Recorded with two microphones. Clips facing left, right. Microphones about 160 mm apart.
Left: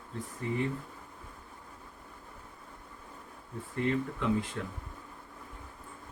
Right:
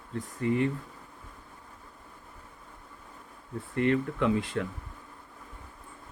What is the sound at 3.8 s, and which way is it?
Speech, 70° right (ahead or behind).